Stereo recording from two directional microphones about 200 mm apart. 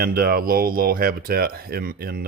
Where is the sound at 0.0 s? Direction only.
45° right (ahead or behind).